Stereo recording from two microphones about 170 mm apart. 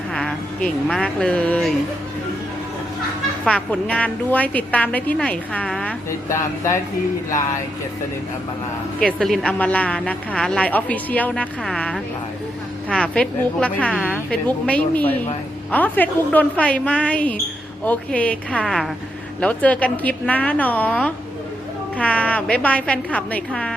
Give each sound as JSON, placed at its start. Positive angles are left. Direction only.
{"t": 0.1, "sound": "speech", "side_deg": 5}
{"t": 3.4, "sound": "speech", "side_deg": 5}
{"t": 9.0, "sound": "speech", "side_deg": 5}
{"t": 13.9, "sound": "a woman's voice", "side_deg": -5}
{"t": 14.3, "sound": "speech", "side_deg": 10}